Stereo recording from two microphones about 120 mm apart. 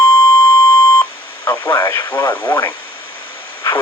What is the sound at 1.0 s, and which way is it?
Beep, 15° left (ahead or behind).